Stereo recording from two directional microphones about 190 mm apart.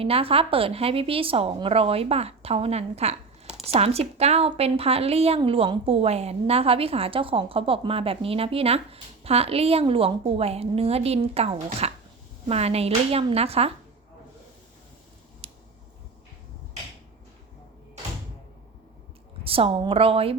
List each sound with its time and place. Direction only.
0.0 s a woman's voice: 30° right (ahead or behind)
15.4 s a sound: 30° right (ahead or behind)
19.5 s a woman's voice: 30° right (ahead or behind)